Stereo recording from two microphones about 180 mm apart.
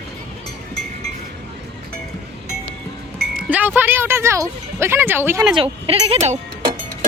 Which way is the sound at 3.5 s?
10° right (ahead or behind).